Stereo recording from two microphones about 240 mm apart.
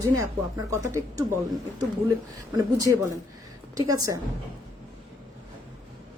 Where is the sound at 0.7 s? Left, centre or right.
Centre.